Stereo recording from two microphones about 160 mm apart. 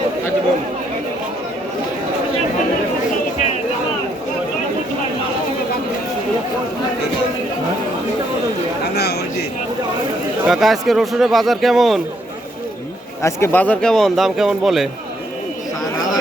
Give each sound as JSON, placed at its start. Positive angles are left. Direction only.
{"t": 8.8, "sound": "chatter", "side_deg": 90}
{"t": 10.4, "sound": "speech", "side_deg": 0}
{"t": 13.2, "sound": "speech", "side_deg": 15}